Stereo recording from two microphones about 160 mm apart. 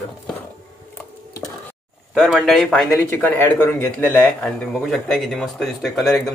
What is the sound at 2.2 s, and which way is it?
Speech, centre (ahead or behind).